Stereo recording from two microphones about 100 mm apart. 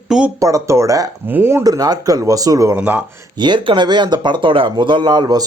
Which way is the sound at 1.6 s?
40° right (ahead or behind).